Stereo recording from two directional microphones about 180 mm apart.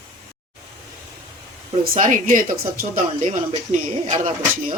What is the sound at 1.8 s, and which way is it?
Speech, 50° right (ahead or behind).